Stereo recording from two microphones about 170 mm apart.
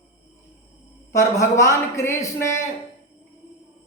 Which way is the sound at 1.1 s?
20° left (ahead or behind).